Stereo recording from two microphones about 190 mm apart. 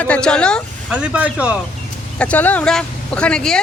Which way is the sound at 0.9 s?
5° right (ahead or behind).